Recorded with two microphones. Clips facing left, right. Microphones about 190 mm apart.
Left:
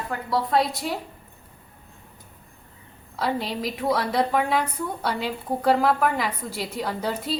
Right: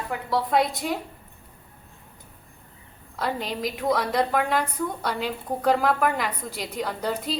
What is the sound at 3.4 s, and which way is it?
A woman's voice, 5° left (ahead or behind).